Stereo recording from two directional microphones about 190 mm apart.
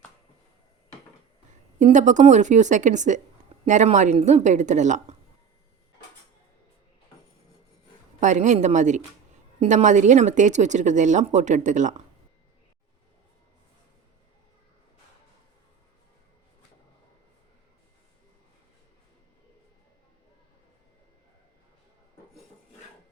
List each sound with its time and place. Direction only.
1.8 s a woman's voice: 40° right (ahead or behind)
8.2 s a woman's voice: 40° right (ahead or behind)